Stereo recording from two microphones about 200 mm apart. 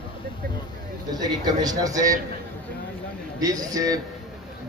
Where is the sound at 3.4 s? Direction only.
20° right (ahead or behind).